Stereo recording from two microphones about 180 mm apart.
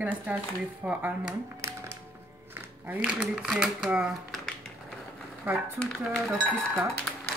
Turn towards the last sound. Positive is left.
turn(degrees=0)  # may be behind; listen again after turning